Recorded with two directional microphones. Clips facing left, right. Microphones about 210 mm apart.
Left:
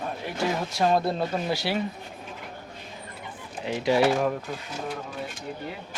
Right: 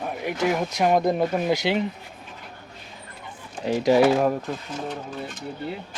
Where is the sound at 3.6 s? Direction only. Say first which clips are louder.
Right 4 dB; 40° right (ahead or behind).